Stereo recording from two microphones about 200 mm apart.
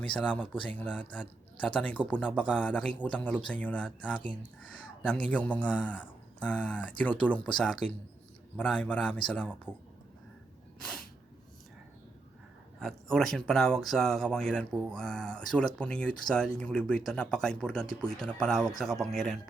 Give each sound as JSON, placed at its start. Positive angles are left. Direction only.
{"t": 0.1, "sound": "speech", "side_deg": 5}
{"t": 12.8, "sound": "speech", "side_deg": 0}